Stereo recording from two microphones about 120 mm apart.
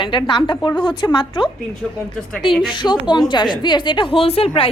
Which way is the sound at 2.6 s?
40° left (ahead or behind).